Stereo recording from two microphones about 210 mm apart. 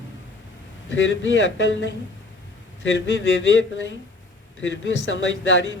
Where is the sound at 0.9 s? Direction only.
60° left (ahead or behind).